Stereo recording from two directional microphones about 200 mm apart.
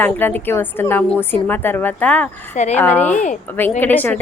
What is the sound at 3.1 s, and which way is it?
Speech, 40° left (ahead or behind).